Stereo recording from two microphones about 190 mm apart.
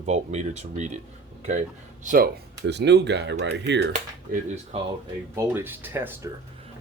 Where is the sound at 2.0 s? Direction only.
50° right (ahead or behind); by 3.8 s 70° right (ahead or behind).